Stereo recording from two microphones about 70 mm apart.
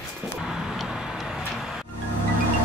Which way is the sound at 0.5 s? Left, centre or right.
Centre.